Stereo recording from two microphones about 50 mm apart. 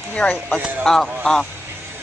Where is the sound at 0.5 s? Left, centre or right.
Right.